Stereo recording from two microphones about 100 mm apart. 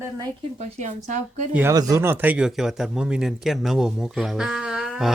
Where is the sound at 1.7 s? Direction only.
35° right (ahead or behind).